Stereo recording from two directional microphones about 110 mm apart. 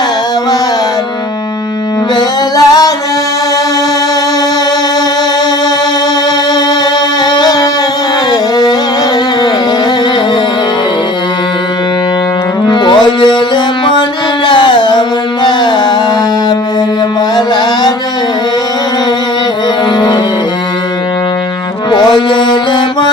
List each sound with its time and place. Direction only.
2.1 s music: 35° left (ahead or behind)
7.3 s a sound: 40° left (ahead or behind)
8.3 s music: 40° left (ahead or behind)
12.6 s music: 45° left (ahead or behind)
14.4 s music: 45° left (ahead or behind)
17.3 s music: 40° left (ahead or behind)
21.9 s music: 45° left (ahead or behind)